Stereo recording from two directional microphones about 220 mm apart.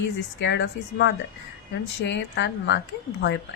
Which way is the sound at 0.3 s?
55° left (ahead or behind).